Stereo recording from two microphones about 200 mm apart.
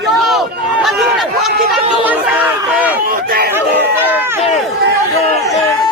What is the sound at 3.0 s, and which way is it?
Speech, 45° right (ahead or behind).